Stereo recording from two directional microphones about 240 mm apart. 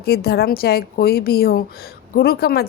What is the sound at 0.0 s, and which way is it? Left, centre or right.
A woman's voice, left.